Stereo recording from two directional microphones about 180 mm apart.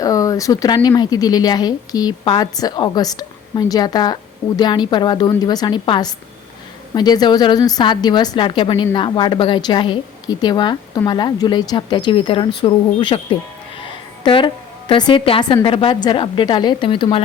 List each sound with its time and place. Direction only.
0.0 s a woman's voice: 20° left (ahead or behind)